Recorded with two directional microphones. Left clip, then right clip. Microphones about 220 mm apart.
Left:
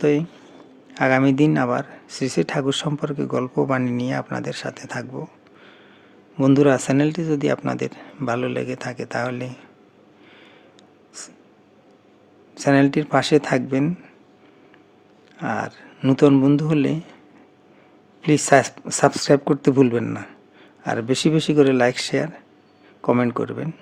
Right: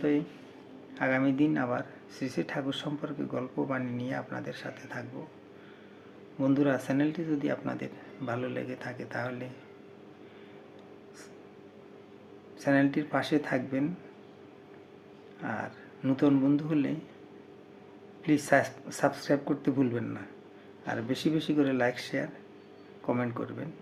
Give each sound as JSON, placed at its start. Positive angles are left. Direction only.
{"t": 0.0, "sound": "speech", "side_deg": 50}
{"t": 6.4, "sound": "speech", "side_deg": 50}
{"t": 12.5, "sound": "speech", "side_deg": 50}
{"t": 15.4, "sound": "speech", "side_deg": 50}
{"t": 18.2, "sound": "speech", "side_deg": 50}